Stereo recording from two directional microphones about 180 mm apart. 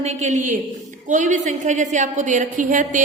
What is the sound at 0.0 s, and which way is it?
A woman's voice, 40° right (ahead or behind).